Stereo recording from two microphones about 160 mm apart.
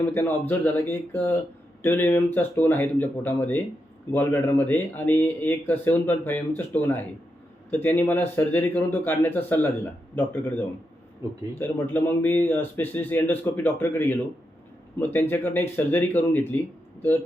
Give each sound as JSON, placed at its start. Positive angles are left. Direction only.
{"t": 0.0, "sound": "speech", "side_deg": 15}
{"t": 11.2, "sound": "speech", "side_deg": -20}
{"t": 11.6, "sound": "speech", "side_deg": 15}